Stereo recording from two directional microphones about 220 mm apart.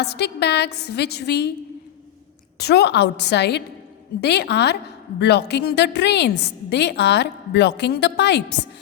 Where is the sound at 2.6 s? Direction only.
50° left (ahead or behind).